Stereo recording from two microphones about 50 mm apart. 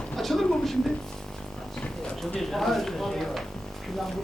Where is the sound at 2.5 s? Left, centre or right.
Centre.